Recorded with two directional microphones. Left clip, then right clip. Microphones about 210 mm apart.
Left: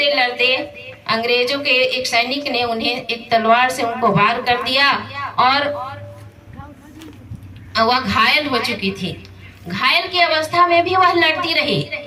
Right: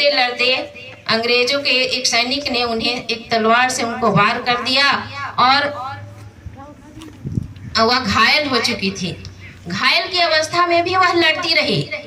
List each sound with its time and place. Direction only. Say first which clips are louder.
0.0 s a woman's voice: even; 20° right (ahead or behind)
7.7 s a woman's voice: even; 20° right (ahead or behind)